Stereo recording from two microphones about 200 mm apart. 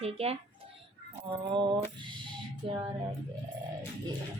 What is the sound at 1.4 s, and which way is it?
Speech, 25° right (ahead or behind).